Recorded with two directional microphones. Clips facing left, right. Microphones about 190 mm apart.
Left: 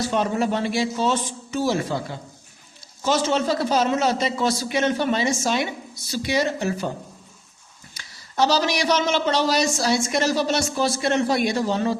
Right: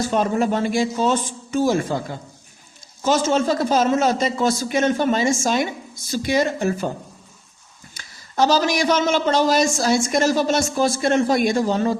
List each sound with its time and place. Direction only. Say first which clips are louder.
0.0 s a man's voice: right 2 dB; 45° right (ahead or behind)
3.0 s a man's voice: right 3 dB; 45° right (ahead or behind)
7.9 s a man's voice: right 2 dB; 50° right (ahead or behind)